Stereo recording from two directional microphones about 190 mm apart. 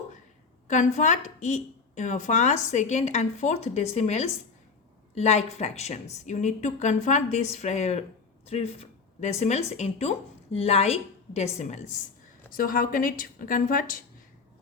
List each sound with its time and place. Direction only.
0.7 s a woman's voice: 40° left (ahead or behind)
12.5 s a woman's voice: 50° left (ahead or behind)